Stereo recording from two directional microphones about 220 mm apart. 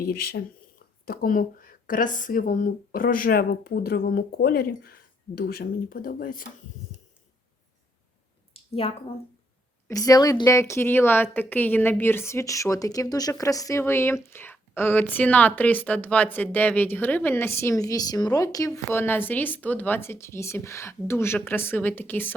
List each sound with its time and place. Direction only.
0.1 s speech: 45° left (ahead or behind)
9.8 s a woman's voice: 15° left (ahead or behind)